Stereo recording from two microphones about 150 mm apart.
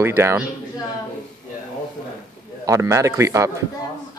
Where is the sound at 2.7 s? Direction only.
20° right (ahead or behind).